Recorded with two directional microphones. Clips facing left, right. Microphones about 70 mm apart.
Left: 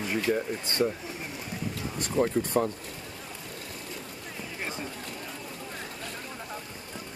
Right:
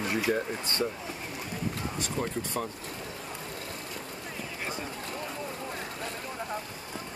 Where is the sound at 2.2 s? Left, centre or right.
Left.